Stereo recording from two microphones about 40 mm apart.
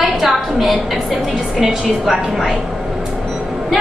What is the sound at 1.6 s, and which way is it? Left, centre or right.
Speech, centre.